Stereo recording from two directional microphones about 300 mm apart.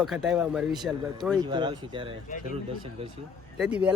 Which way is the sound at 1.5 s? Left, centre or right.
Centre.